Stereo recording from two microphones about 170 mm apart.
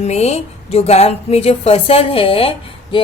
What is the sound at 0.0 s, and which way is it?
A woman's voice, 40° left (ahead or behind).